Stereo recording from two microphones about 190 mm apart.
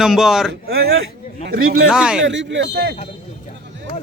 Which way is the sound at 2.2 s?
70° right (ahead or behind).